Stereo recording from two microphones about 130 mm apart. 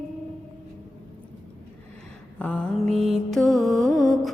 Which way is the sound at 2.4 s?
10° left (ahead or behind).